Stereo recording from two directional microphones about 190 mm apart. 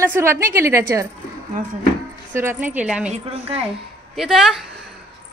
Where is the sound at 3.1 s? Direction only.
30° right (ahead or behind).